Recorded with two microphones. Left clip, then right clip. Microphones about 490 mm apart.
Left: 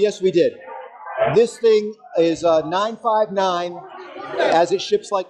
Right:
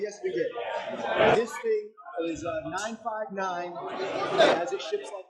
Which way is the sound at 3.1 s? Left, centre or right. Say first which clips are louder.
Left 14 dB; left.